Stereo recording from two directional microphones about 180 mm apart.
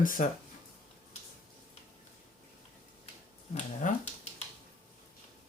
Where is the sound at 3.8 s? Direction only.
45° left (ahead or behind).